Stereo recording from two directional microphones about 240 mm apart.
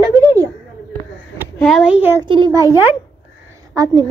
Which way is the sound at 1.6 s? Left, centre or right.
Centre.